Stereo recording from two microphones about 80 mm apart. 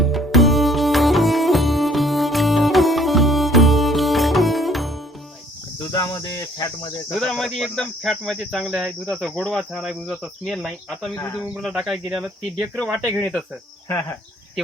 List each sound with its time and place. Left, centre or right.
0.0 s music: centre
6.2 s cricket: left
7.2 s speech: centre
9.0 s insect: centre
9.5 s speech: centre
11.4 s speech: centre
13.1 s insect: centre